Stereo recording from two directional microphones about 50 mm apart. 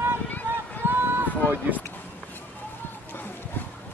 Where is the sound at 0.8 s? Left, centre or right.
Right.